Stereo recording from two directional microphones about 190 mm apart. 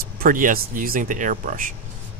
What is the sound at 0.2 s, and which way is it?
Speech, 45° right (ahead or behind).